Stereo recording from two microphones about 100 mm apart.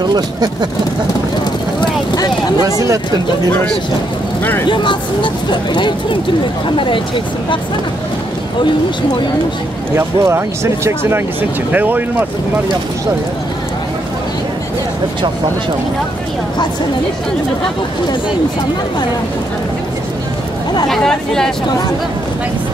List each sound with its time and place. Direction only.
0.0 s speech: 45° right (ahead or behind)
1.8 s vehicle: 45° left (ahead or behind)
4.6 s speech: 50° left (ahead or behind)
9.9 s speech: 25° right (ahead or behind)
20.9 s speech: 5° left (ahead or behind)